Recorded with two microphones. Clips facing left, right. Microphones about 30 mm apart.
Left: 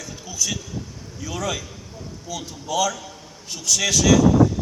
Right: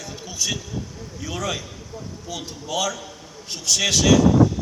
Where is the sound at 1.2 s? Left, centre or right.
Right.